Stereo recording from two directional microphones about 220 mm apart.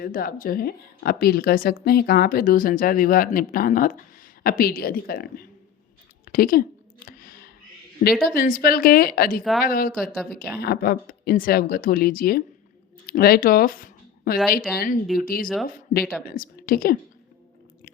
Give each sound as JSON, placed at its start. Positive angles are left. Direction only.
{"t": 0.0, "sound": "a woman's voice", "side_deg": 40}
{"t": 6.2, "sound": "a sound", "side_deg": 40}
{"t": 8.2, "sound": "a woman's voice", "side_deg": 40}
{"t": 9.4, "sound": "speech", "side_deg": 0}
{"t": 9.6, "sound": "a woman's voice", "side_deg": 40}